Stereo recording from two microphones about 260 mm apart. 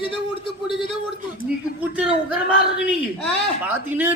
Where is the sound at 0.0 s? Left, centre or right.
Centre.